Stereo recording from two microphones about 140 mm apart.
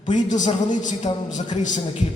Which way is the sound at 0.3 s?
60° left (ahead or behind).